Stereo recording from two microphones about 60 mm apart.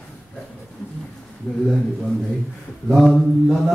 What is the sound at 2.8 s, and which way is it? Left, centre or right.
Mantra, centre.